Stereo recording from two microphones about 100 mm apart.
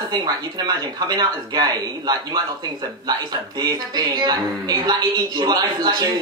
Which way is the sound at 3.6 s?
40° right (ahead or behind).